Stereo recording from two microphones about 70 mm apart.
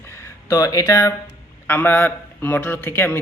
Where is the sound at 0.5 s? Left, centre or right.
Left.